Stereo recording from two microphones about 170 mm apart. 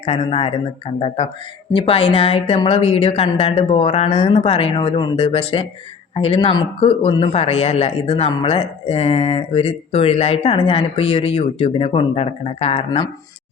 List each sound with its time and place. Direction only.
0.0 s speech: 35° left (ahead or behind)